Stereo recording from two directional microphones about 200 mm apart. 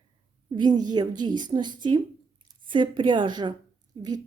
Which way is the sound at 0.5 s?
20° right (ahead or behind).